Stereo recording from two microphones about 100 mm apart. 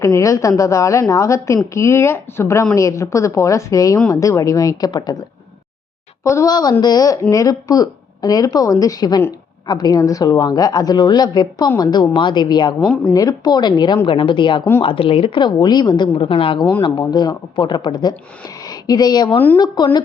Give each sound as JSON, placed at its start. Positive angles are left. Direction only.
{"t": 0.0, "sound": "speech", "side_deg": 30}
{"t": 6.2, "sound": "a woman's voice", "side_deg": 35}
{"t": 12.8, "sound": "speech", "side_deg": 10}
{"t": 13.1, "sound": "a woman's voice", "side_deg": 40}
{"t": 14.8, "sound": "a woman's voice", "side_deg": 65}
{"t": 16.2, "sound": "a woman's voice", "side_deg": 65}
{"t": 17.0, "sound": "a woman's voice", "side_deg": 45}